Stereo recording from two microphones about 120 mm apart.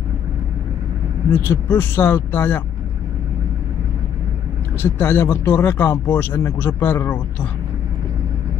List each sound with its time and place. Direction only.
1.4 s speech: 20° left (ahead or behind)
4.9 s speech: 15° left (ahead or behind)